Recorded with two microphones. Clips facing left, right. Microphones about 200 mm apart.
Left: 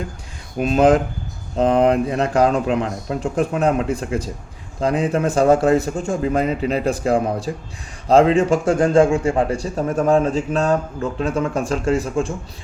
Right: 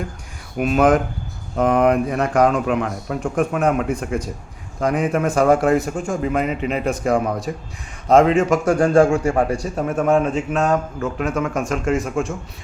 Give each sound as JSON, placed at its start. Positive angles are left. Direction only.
{"t": 0.6, "sound": "a man's voice", "side_deg": 30}